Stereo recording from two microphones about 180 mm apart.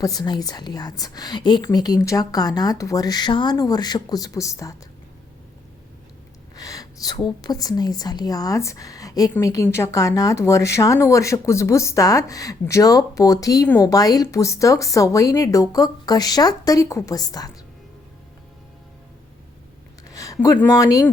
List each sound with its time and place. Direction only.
0.0 s a woman's voice: 20° left (ahead or behind)
6.6 s a woman's voice: 20° left (ahead or behind)
20.1 s speech: 20° left (ahead or behind)